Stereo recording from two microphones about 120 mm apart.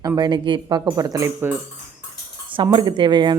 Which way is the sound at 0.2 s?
40° right (ahead or behind).